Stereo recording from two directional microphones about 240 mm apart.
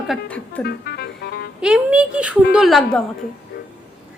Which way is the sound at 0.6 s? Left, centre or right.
Left.